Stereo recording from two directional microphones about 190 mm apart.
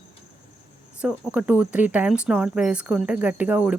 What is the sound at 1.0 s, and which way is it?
Speech, 5° right (ahead or behind).